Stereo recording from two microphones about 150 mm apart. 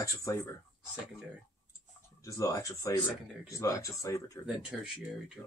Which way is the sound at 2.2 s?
20° left (ahead or behind).